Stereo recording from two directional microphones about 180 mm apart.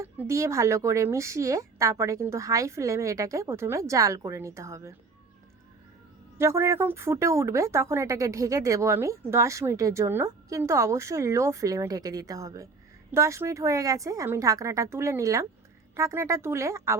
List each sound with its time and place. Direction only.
0.0 s speech: 15° right (ahead or behind)
6.3 s speech: 15° right (ahead or behind)